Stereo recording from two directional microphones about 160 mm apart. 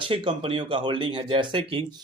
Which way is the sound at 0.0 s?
30° right (ahead or behind).